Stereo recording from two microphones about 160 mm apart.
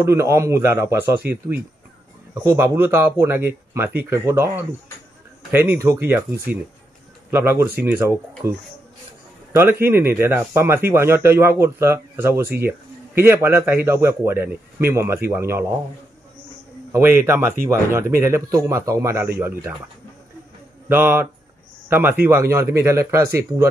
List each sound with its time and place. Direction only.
0.0 s speech: 15° right (ahead or behind)
2.4 s speech: 15° right (ahead or behind)
9.5 s speech: 15° right (ahead or behind)
16.9 s speech: 15° right (ahead or behind)
20.9 s speech: 15° right (ahead or behind)